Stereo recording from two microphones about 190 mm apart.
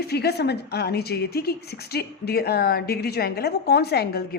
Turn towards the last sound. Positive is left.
turn(degrees=55)  # may be behind; listen again after turning